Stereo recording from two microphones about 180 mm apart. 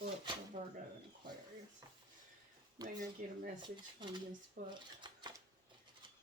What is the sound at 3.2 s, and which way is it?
Speech, 45° right (ahead or behind).